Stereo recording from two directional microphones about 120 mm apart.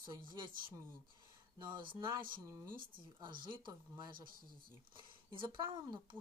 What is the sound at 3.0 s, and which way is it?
Speech, 40° right (ahead or behind).